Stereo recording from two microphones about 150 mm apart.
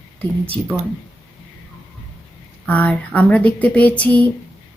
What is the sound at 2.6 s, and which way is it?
A woman's voice, 10° left (ahead or behind).